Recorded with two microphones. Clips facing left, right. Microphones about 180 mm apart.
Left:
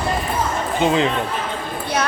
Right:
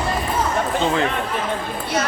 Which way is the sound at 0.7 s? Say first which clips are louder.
Left 4 dB; 20° left (ahead or behind).